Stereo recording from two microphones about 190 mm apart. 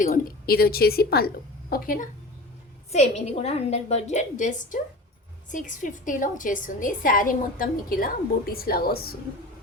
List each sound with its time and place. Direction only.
0.0 s a woman's voice: 45° left (ahead or behind)
2.9 s a woman's voice: 35° left (ahead or behind); by 9.1 s 55° left (ahead or behind)